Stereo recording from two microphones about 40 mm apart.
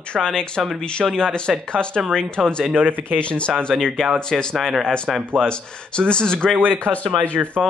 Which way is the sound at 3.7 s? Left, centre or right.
Centre.